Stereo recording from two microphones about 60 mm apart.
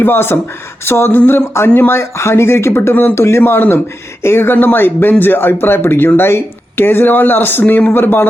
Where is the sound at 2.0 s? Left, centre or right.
Left.